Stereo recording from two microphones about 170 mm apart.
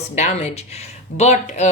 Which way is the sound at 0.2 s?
40° left (ahead or behind).